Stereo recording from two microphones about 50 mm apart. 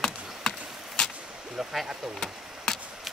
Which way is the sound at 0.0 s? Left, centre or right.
Centre.